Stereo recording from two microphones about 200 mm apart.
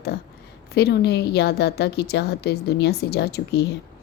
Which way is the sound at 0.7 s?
55° left (ahead or behind).